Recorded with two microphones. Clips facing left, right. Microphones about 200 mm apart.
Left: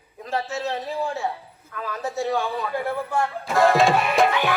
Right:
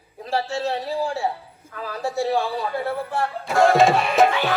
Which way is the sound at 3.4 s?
Centre (ahead or behind).